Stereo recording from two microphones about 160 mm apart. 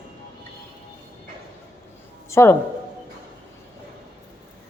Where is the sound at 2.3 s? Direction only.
15° left (ahead or behind).